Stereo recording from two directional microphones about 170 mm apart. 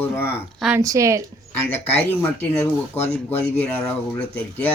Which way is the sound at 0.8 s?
20° right (ahead or behind).